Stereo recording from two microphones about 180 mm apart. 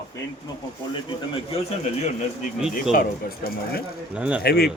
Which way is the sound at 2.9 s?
55° left (ahead or behind).